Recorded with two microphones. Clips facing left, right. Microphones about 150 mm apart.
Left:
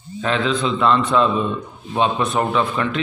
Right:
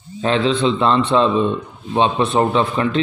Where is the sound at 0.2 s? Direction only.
30° right (ahead or behind).